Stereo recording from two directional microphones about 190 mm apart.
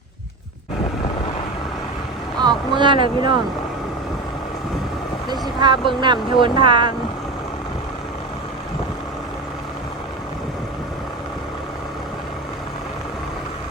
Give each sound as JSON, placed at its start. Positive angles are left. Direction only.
{"t": 2.4, "sound": "speech", "side_deg": -25}
{"t": 5.3, "sound": "speech", "side_deg": -25}